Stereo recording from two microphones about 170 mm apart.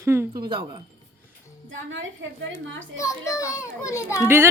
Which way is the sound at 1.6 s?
90° right.